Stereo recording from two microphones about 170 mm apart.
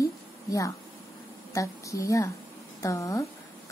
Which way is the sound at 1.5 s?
20° left (ahead or behind).